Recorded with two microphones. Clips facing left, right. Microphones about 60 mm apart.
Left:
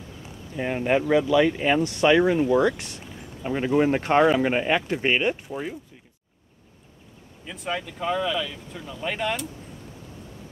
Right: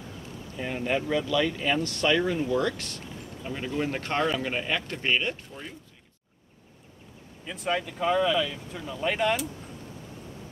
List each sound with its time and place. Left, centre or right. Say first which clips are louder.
0.6 s speech: left 6 dB; left
7.4 s speech: right 1 dB; centre